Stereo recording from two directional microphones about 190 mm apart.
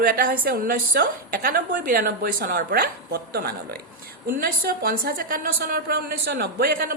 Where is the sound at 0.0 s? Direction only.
50° right (ahead or behind).